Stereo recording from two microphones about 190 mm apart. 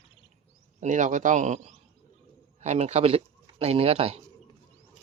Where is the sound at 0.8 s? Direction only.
40° right (ahead or behind).